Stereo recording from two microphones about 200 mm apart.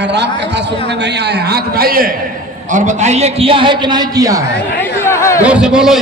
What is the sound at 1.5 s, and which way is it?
Speech, 45° right (ahead or behind).